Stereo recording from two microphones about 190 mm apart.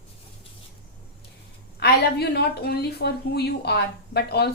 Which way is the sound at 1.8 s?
55° left (ahead or behind).